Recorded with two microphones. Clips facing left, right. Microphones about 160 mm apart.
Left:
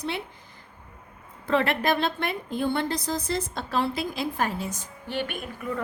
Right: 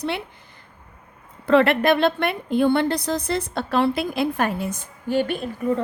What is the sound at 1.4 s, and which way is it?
A woman's voice, 70° right (ahead or behind).